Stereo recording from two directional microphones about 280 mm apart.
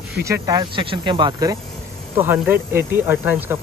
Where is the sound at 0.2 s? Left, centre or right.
Centre.